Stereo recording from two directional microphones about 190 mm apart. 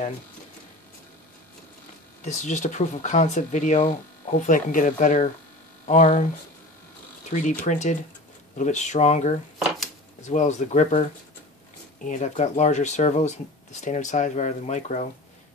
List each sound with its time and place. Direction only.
2.2 s speech: 40° left (ahead or behind)
7.2 s speech: 40° left (ahead or behind)